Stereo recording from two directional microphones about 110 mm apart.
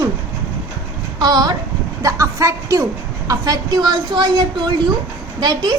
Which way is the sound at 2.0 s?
30° right (ahead or behind).